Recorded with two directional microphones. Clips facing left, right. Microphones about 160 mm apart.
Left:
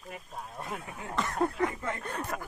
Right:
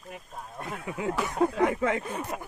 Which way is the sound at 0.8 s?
90° right.